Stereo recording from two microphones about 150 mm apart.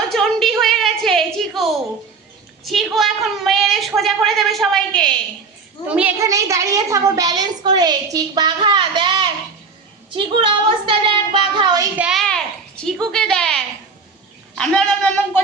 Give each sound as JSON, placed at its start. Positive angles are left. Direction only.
{"t": 0.1, "sound": "a sound", "side_deg": 5}
{"t": 2.6, "sound": "a woman's voice", "side_deg": 0}
{"t": 5.9, "sound": "a child's voice", "side_deg": -10}
{"t": 6.1, "sound": "a woman's voice", "side_deg": -20}
{"t": 11.9, "sound": "a woman's voice", "side_deg": -5}